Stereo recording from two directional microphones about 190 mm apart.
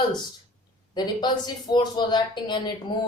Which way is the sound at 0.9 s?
20° left (ahead or behind).